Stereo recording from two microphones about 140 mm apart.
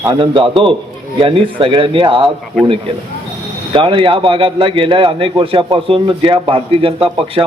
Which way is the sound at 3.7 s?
35° right (ahead or behind).